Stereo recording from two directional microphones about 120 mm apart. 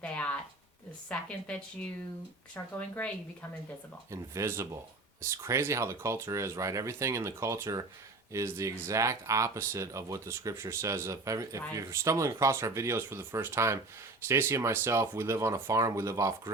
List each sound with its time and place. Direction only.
0.0 s a sound: 10° left (ahead or behind)
1.0 s a woman's voice: 10° left (ahead or behind)
4.1 s speech: 25° right (ahead or behind)